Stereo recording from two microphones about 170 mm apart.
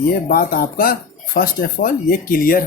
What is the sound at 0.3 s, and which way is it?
Speech, 60° left (ahead or behind).